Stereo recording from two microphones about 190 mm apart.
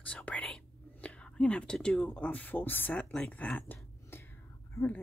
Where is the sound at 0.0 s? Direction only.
5° left (ahead or behind).